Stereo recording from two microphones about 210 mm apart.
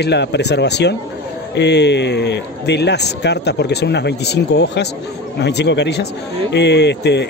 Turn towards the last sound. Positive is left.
turn(degrees=55)  # may be behind; listen again after turning